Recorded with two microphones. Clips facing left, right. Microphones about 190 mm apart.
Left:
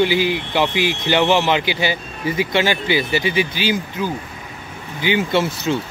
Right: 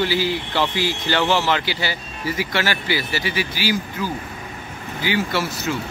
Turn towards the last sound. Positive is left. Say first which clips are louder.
# left 5 dB
turn(degrees=20)  # may be behind; listen again after turning